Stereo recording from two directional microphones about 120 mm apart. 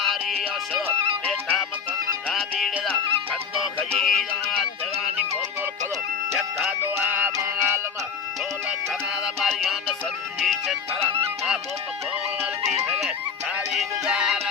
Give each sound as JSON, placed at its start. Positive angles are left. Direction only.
{"t": 0.0, "sound": "music", "side_deg": 0}
{"t": 3.9, "sound": "music", "side_deg": 0}
{"t": 6.7, "sound": "music", "side_deg": -20}
{"t": 8.9, "sound": "music", "side_deg": 0}